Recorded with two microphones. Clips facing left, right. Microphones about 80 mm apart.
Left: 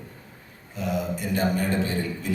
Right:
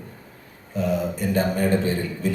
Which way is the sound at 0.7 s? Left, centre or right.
Right.